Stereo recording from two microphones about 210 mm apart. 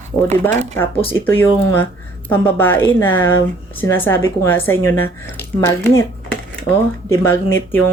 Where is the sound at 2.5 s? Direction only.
10° left (ahead or behind).